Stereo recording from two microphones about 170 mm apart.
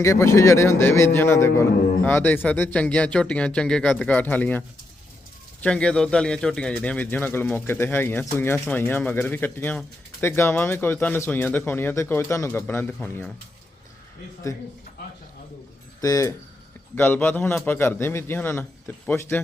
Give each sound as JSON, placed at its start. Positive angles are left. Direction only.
{"t": 0.0, "sound": "speech", "side_deg": 15}
{"t": 5.6, "sound": "speech", "side_deg": 5}
{"t": 16.0, "sound": "speech", "side_deg": 20}